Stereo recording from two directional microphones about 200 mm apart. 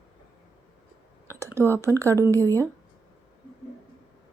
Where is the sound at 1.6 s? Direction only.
10° right (ahead or behind).